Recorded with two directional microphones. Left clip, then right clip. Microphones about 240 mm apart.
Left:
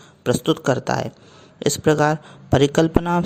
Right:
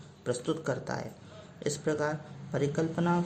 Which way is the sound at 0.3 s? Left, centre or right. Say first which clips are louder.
Left 13 dB; left.